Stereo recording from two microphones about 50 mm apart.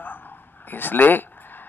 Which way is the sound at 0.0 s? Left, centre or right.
Left.